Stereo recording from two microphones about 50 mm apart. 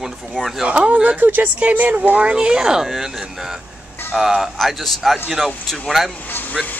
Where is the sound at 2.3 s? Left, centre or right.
Centre.